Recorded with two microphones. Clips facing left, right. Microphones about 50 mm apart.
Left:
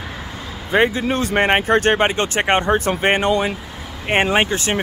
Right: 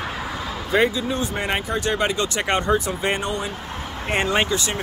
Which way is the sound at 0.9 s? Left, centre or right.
Left.